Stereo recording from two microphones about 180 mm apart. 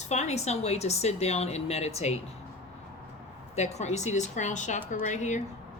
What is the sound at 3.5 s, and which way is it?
A woman's voice, 40° left (ahead or behind).